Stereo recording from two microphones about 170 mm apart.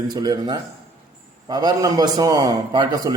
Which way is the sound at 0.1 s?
20° right (ahead or behind).